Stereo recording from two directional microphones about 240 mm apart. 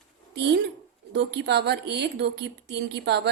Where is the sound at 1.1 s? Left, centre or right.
Right.